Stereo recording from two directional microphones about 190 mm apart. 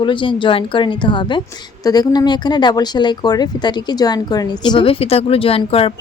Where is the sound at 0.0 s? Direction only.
25° left (ahead or behind).